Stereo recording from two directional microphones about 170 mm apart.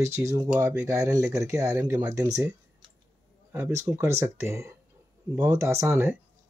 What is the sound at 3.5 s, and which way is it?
Speech, 15° right (ahead or behind).